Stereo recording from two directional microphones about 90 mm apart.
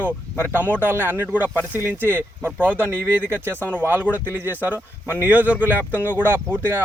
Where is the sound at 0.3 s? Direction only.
25° left (ahead or behind).